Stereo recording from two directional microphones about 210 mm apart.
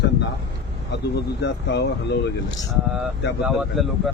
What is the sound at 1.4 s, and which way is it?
Speech, 50° left (ahead or behind).